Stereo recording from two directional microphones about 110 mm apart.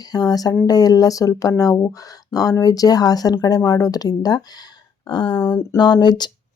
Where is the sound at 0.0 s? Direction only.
35° left (ahead or behind).